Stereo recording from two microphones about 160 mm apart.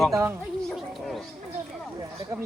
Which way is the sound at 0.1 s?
15° right (ahead or behind).